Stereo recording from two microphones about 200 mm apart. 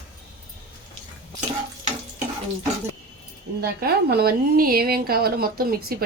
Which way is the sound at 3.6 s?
50° right (ahead or behind).